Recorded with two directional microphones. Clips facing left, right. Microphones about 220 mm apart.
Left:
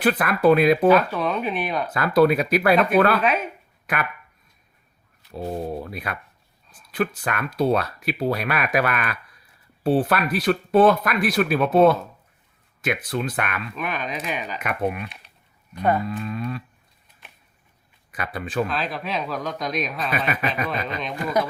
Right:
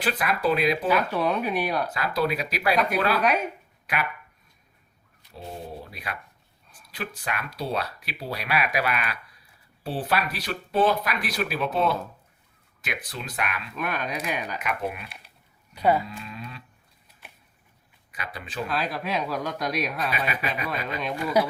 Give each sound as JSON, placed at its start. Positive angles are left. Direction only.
{"t": 0.0, "sound": "speech", "side_deg": 55}
{"t": 0.9, "sound": "speech", "side_deg": -10}
{"t": 1.9, "sound": "speech", "side_deg": 50}
{"t": 5.3, "sound": "speech", "side_deg": 55}
{"t": 7.3, "sound": "speech", "side_deg": 50}
{"t": 14.1, "sound": "speech", "side_deg": -10}
{"t": 14.6, "sound": "speech", "side_deg": 55}
{"t": 15.7, "sound": "speech", "side_deg": -10}
{"t": 16.0, "sound": "speech", "side_deg": 50}
{"t": 18.1, "sound": "speech", "side_deg": 50}
{"t": 18.7, "sound": "speech", "side_deg": -10}
{"t": 20.1, "sound": "speech", "side_deg": 50}
{"t": 20.7, "sound": "speech", "side_deg": -5}